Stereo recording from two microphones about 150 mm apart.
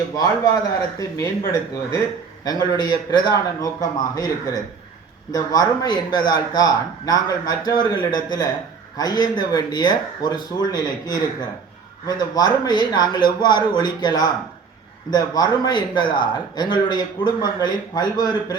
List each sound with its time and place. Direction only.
0.2 s a man's voice: 25° left (ahead or behind)
2.4 s a man's voice: 25° left (ahead or behind)